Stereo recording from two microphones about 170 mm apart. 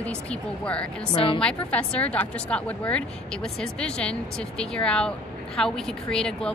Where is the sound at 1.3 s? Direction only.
5° left (ahead or behind).